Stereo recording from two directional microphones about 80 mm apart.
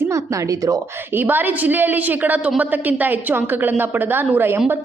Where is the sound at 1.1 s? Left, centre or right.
Right.